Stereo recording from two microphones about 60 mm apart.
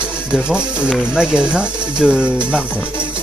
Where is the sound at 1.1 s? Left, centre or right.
Centre.